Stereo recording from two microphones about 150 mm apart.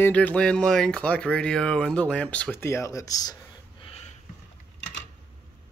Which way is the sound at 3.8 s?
40° left (ahead or behind).